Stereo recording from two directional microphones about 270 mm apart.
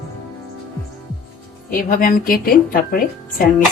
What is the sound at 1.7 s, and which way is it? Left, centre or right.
Speech, left.